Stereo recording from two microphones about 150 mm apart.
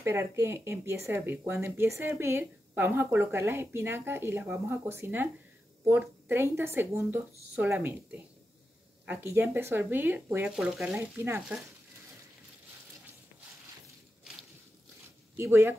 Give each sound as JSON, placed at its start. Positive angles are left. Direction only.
{"t": 0.0, "sound": "speech", "side_deg": -15}
{"t": 11.0, "sound": "speech", "side_deg": -15}
{"t": 15.3, "sound": "speech", "side_deg": -15}